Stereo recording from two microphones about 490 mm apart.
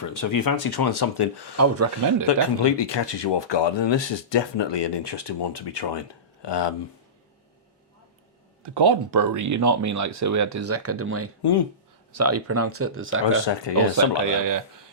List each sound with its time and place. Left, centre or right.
0.0 s speech: left
1.5 s speech: right
2.2 s speech: left
8.6 s speech: right
13.4 s speech: left
13.7 s speech: right